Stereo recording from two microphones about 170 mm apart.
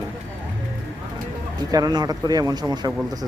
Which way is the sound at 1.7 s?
25° right (ahead or behind).